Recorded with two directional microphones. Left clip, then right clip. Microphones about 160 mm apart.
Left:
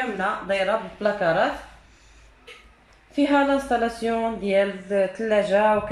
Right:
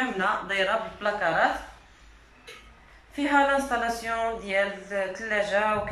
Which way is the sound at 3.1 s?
65° left (ahead or behind).